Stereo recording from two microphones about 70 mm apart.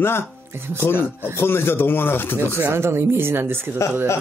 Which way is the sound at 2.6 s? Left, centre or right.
Right.